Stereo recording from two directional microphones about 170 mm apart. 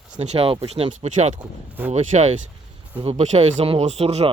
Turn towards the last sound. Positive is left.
turn(degrees=-35)  # may be behind; listen again after turning